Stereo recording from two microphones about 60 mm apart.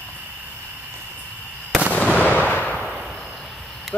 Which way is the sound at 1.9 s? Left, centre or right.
Left.